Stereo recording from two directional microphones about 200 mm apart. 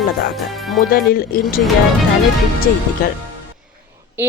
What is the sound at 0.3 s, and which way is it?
Speech, centre (ahead or behind).